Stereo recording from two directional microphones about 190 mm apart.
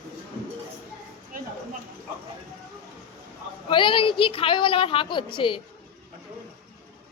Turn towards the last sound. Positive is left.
turn(degrees=25)  # may be behind; listen again after turning